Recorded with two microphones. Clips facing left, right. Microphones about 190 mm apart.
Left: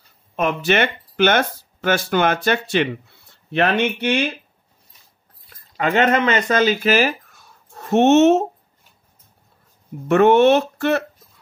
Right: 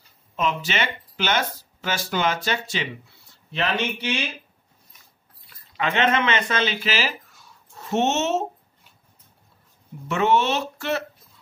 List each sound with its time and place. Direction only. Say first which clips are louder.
0.4 s speech: left 7 dB; 55° left (ahead or behind)
5.5 s speech: left 6 dB; 45° left (ahead or behind)
10.0 s speech: left 9 dB; 55° left (ahead or behind)